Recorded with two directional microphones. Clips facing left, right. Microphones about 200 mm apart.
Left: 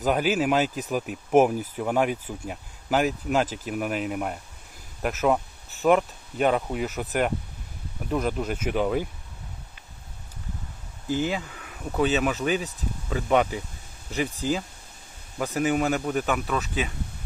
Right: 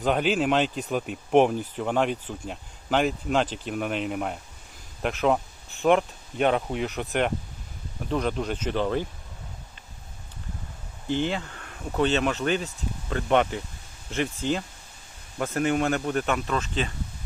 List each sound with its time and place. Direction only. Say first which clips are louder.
0.0 s speech: even; 5° left (ahead or behind)
11.1 s speech: even; 5° left (ahead or behind)